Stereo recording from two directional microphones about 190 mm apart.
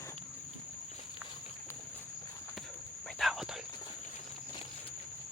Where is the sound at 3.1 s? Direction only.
Centre (ahead or behind).